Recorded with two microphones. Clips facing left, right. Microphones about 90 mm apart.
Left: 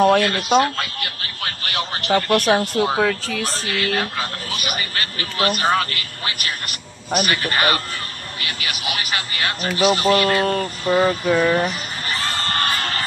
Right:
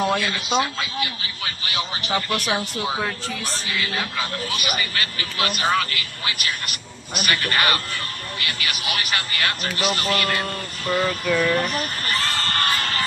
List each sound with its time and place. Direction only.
0.0 s speech: 70° left (ahead or behind)
3.1 s speech: 90° left; by 4.1 s 60° left (ahead or behind)
4.2 s speech: 35° left (ahead or behind)
7.2 s a man's voice: 25° left (ahead or behind)
10.4 s speech: 55° left (ahead or behind)
10.9 s a sound: 25° left (ahead or behind)